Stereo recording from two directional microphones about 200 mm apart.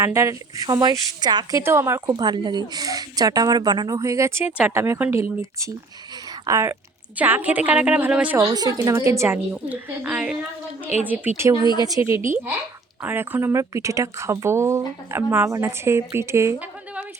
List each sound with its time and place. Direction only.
0.0 s speech: 15° right (ahead or behind)